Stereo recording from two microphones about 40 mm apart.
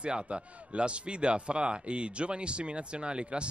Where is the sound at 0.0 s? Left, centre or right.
Right.